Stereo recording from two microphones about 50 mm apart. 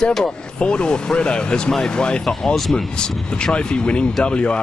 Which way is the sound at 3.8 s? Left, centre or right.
Left.